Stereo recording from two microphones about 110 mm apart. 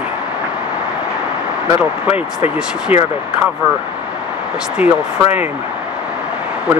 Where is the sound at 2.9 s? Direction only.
70° left (ahead or behind).